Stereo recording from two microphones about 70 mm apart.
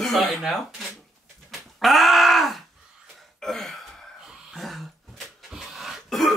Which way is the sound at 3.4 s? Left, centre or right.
Centre.